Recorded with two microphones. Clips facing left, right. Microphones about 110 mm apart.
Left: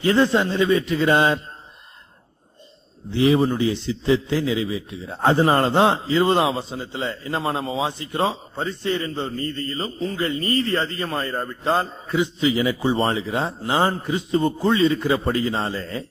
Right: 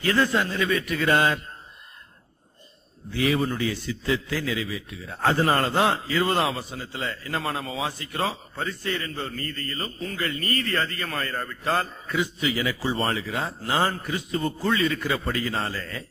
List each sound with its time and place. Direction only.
0.0 s a man's voice: 25° left (ahead or behind)
3.1 s a man's voice: 25° left (ahead or behind)